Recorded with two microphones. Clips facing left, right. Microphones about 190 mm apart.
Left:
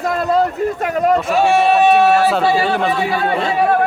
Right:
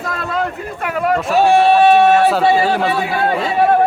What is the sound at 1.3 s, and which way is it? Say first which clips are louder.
Speech: right 2 dB; centre (ahead or behind).